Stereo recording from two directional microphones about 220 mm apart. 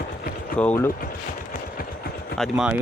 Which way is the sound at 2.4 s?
5° right (ahead or behind).